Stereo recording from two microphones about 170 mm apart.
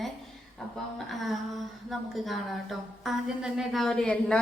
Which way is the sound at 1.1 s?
Centre (ahead or behind).